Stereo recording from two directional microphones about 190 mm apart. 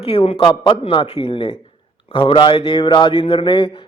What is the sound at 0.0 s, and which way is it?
A man's voice, 30° left (ahead or behind).